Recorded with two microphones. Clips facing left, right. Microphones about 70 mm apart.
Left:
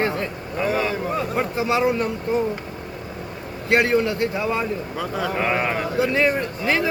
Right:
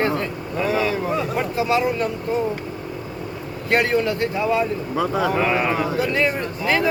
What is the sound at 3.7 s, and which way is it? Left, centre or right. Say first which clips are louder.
Speech: left 1 dB; centre.